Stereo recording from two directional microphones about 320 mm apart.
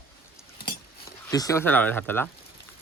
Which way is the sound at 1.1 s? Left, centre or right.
Centre.